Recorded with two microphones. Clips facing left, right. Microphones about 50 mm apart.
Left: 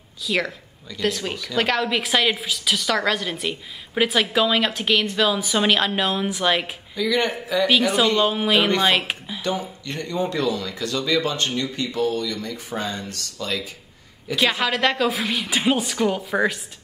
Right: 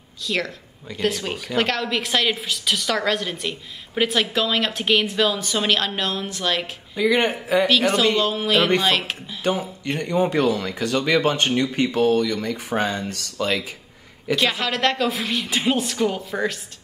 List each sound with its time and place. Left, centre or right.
0.2 s a woman's voice: centre
1.3 s speech: right
1.6 s a woman's voice: centre
7.0 s speech: right
8.2 s speech: centre
9.4 s speech: right
14.3 s a woman's voice: centre